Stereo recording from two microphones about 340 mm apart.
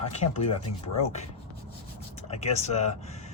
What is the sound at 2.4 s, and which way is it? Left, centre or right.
Speech, centre.